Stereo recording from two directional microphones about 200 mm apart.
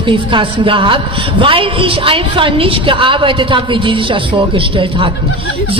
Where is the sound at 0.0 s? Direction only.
25° right (ahead or behind).